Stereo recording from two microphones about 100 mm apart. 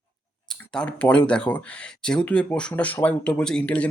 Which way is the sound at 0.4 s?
5° left (ahead or behind).